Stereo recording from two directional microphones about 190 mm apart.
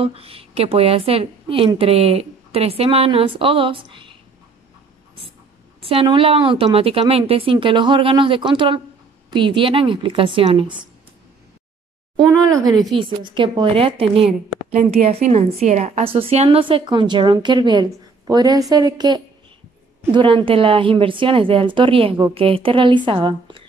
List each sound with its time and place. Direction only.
0.0 s a woman's voice: 30° right (ahead or behind)
5.8 s a woman's voice: 30° right (ahead or behind)
12.3 s a woman's voice: 15° right (ahead or behind)